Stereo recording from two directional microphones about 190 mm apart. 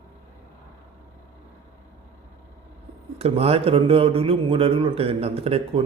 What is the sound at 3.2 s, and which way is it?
Speech, 35° right (ahead or behind).